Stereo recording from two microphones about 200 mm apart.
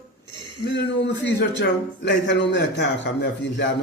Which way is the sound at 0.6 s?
60° left (ahead or behind).